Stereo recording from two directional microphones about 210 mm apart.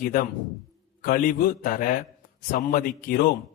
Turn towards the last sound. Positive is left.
turn(degrees=45)  # may be behind; listen again after turning